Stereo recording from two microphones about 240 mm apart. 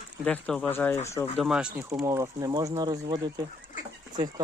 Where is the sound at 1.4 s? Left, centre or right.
Centre.